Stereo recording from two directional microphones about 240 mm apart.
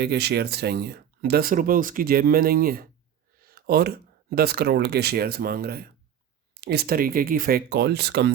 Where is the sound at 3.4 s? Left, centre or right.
Right.